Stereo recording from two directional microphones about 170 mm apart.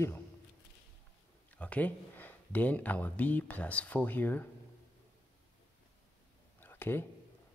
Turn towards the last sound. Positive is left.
turn(degrees=15)  # may be behind; listen again after turning